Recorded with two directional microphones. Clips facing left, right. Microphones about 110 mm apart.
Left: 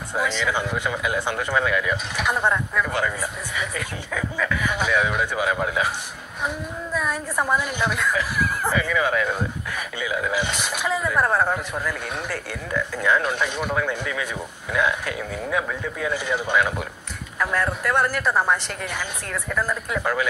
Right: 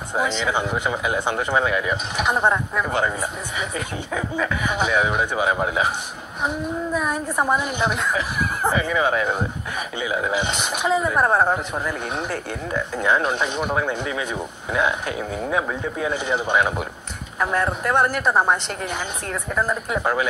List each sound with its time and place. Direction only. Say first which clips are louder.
0.1 s a woman's voice: right 2 dB; 20° right (ahead or behind)